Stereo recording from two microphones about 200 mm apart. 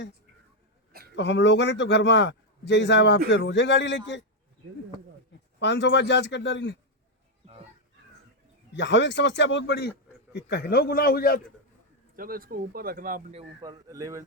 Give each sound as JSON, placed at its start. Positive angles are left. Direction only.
{"t": 1.1, "sound": "a man's voice", "side_deg": 60}
{"t": 5.5, "sound": "a man's voice", "side_deg": 60}
{"t": 8.7, "sound": "a man's voice", "side_deg": 65}
{"t": 12.1, "sound": "speech", "side_deg": -45}
{"t": 13.6, "sound": "speech", "side_deg": -20}